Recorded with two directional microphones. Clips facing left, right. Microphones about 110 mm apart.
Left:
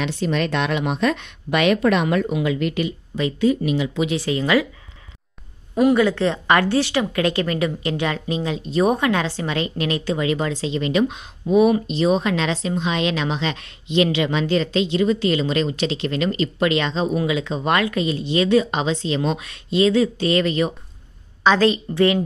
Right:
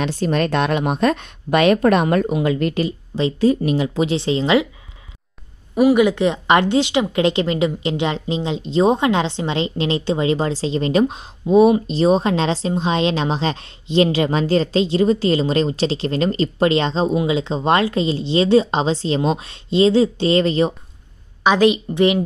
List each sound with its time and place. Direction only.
0.0 s a woman's voice: 40° right (ahead or behind); by 4.6 s 25° right (ahead or behind)
5.9 s a woman's voice: 15° right (ahead or behind); by 20.7 s 30° right (ahead or behind)
21.5 s a woman's voice: 15° right (ahead or behind)